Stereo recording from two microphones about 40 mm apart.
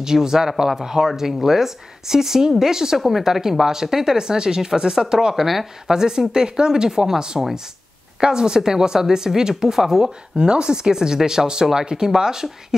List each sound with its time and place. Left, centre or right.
0.0 s speech: centre
10.3 s speech: right